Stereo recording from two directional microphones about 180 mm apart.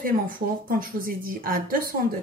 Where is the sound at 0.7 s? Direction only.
50° right (ahead or behind).